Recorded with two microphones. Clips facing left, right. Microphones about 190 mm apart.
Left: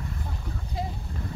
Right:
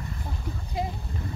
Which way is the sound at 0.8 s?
15° right (ahead or behind).